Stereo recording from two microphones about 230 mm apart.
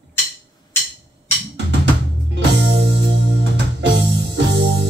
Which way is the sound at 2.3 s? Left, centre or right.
Right.